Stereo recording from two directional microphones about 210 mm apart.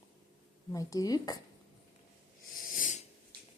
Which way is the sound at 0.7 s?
15° left (ahead or behind).